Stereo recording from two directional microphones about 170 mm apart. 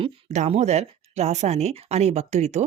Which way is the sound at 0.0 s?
40° right (ahead or behind).